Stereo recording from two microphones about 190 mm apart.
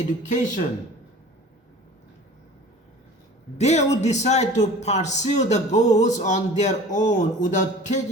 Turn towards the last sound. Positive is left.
turn(degrees=40)  # may be behind; listen again after turning